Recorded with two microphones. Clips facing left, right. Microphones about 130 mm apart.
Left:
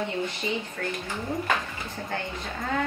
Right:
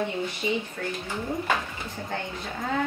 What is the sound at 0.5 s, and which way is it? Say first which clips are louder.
Speech: right 4 dB; 5° right (ahead or behind).